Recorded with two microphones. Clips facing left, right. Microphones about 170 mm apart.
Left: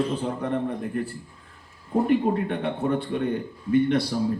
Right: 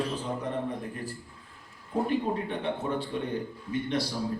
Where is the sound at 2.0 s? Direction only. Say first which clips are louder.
Left 7 dB; 60° left (ahead or behind).